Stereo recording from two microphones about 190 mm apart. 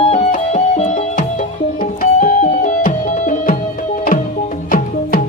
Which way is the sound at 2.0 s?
40° left (ahead or behind).